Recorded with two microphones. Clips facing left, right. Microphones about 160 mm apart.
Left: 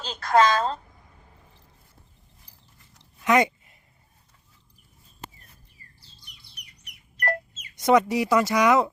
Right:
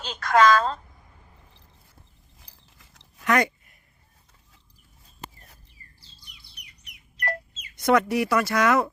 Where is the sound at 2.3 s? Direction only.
90° right.